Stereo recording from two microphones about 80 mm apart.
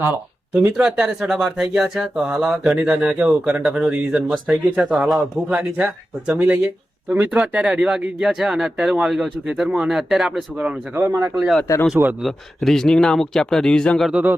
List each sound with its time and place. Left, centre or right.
0.0 s speech: right
0.8 s speech: centre
4.9 s speech: centre
5.5 s speech: centre
11.0 s a man's voice: right
12.6 s speech: centre
14.1 s speech: centre